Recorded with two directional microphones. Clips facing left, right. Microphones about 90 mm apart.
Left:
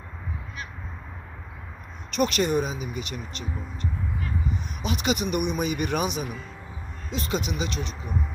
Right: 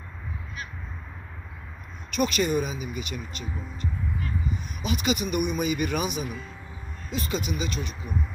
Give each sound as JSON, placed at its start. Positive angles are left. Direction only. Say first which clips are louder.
{"t": 2.1, "sound": "speech", "louder": "left 1 dB", "side_deg": 60}
{"t": 4.8, "sound": "speech", "louder": "even", "side_deg": 60}